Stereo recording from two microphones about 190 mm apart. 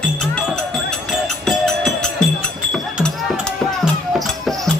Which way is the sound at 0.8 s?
Centre (ahead or behind).